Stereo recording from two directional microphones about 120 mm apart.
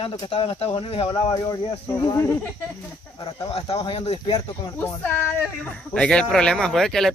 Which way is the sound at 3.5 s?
50° left (ahead or behind).